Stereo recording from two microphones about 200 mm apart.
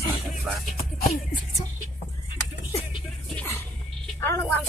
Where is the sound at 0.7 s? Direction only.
35° left (ahead or behind).